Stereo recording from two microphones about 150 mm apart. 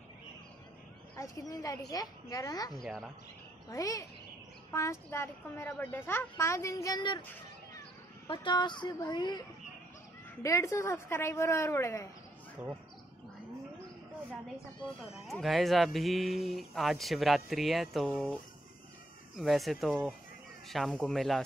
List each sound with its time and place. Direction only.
1.1 s a woman's voice: 20° left (ahead or behind)
2.7 s speech: centre (ahead or behind)
3.6 s a woman's voice: 25° left (ahead or behind)
8.3 s a woman's voice: 30° left (ahead or behind)
10.4 s a woman's voice: 20° left (ahead or behind)
12.6 s speech: 10° right (ahead or behind)
15.1 s speech: centre (ahead or behind)